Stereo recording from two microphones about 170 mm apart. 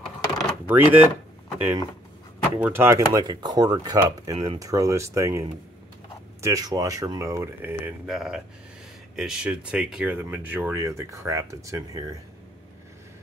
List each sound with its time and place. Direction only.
0.4 s a sound: 10° right (ahead or behind)
2.5 s speech: 15° right (ahead or behind)
8.1 s speech: centre (ahead or behind); by 12.0 s 20° right (ahead or behind)